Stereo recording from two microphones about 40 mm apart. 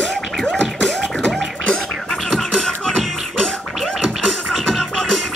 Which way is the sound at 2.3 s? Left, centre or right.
Centre.